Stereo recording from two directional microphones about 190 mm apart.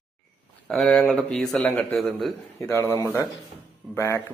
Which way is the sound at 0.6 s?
5° left (ahead or behind).